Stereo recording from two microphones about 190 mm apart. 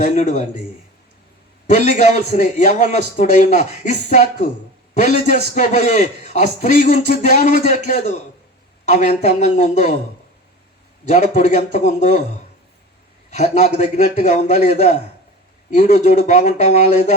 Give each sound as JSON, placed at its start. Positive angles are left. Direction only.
{"t": 0.0, "sound": "a man's voice", "side_deg": 35}
{"t": 1.7, "sound": "a man's voice", "side_deg": 40}
{"t": 8.9, "sound": "a man's voice", "side_deg": 40}
{"t": 11.3, "sound": "a man's voice", "side_deg": 40}
{"t": 11.8, "sound": "speech", "side_deg": -60}
{"t": 13.3, "sound": "a man's voice", "side_deg": 35}
{"t": 15.7, "sound": "a man's voice", "side_deg": 40}